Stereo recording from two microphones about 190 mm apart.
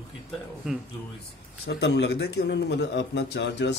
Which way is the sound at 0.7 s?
5° right (ahead or behind).